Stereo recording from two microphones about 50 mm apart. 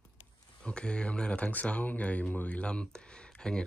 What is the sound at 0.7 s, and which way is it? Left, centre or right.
Speech, centre.